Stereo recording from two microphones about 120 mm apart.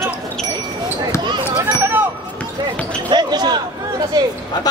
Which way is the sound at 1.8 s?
15° right (ahead or behind).